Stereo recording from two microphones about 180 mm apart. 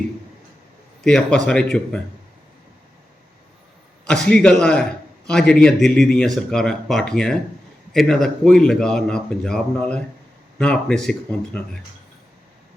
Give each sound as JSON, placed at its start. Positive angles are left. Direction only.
{"t": 1.0, "sound": "a man's voice", "side_deg": 5}
{"t": 4.0, "sound": "a man's voice", "side_deg": 5}